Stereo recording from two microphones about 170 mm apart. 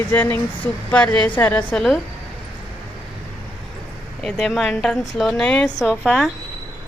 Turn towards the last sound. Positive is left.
turn(degrees=0)  # may be behind; listen again after turning